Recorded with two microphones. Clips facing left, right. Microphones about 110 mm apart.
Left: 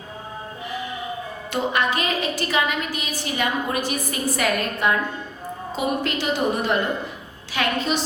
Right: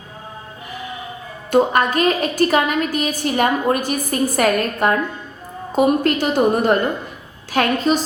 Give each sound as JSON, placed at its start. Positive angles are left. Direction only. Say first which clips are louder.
{"t": 1.5, "sound": "a woman's voice", "louder": "right 8 dB", "side_deg": -45}